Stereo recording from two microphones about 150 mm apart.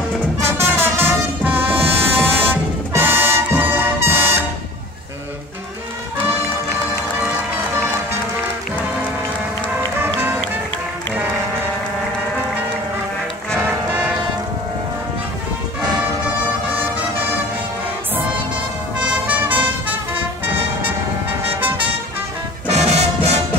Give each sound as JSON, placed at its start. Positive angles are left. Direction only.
{"t": 0.5, "sound": "music", "side_deg": -15}
{"t": 10.0, "sound": "music", "side_deg": -15}
{"t": 13.6, "sound": "music", "side_deg": -10}
{"t": 16.6, "sound": "music", "side_deg": -10}
{"t": 18.9, "sound": "music", "side_deg": -10}
{"t": 22.7, "sound": "music", "side_deg": -45}